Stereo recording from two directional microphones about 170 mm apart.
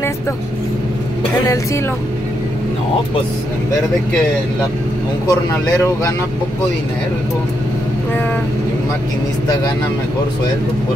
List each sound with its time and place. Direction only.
5.2 s speech: 20° left (ahead or behind)